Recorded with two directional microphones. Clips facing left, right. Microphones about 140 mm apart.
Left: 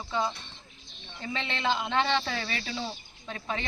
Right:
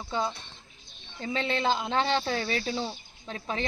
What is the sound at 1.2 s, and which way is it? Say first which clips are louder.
A woman's voice: right 5 dB; 40° right (ahead or behind).